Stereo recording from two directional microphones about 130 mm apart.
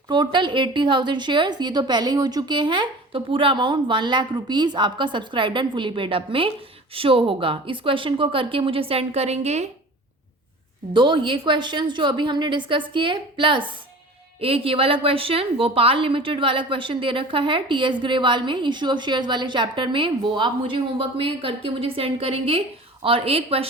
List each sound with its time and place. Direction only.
0.1 s a woman's voice: 35° right (ahead or behind); by 9.6 s 55° right (ahead or behind)
10.9 s a woman's voice: 40° right (ahead or behind)